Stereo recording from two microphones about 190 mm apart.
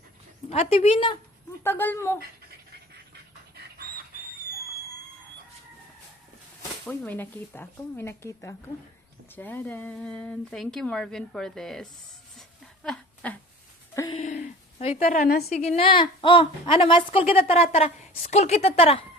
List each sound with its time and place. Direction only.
0.5 s a woman's voice: 35° left (ahead or behind)
1.6 s speech: 10° left (ahead or behind)
6.8 s speech: 10° left (ahead or behind)
12.4 s a sound: 5° left (ahead or behind)
14.1 s speech: 35° left (ahead or behind)
15.0 s a woman's voice: 50° left (ahead or behind)
15.4 s a woman's voice: 35° left (ahead or behind)